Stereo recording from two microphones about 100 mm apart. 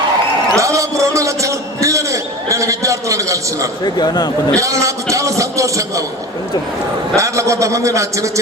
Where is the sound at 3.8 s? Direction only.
45° left (ahead or behind).